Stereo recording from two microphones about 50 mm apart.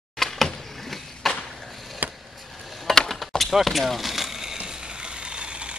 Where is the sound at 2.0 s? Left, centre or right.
Right.